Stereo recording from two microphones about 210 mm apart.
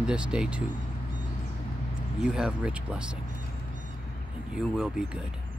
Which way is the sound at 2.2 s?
5° right (ahead or behind).